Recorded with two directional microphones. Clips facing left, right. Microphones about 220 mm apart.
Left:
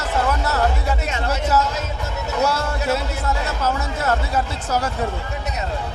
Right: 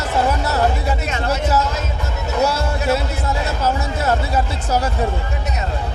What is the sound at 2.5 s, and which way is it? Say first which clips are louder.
Music: right 2 dB; 10° right (ahead or behind).